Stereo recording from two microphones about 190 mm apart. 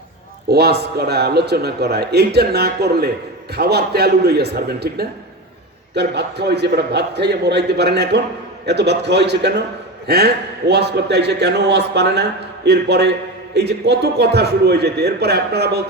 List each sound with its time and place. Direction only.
0.5 s a man's voice: 60° right (ahead or behind)